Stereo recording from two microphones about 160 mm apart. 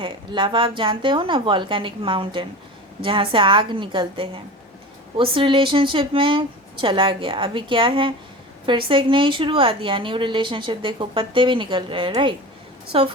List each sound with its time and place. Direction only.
0.0 s a woman's voice: 30° right (ahead or behind)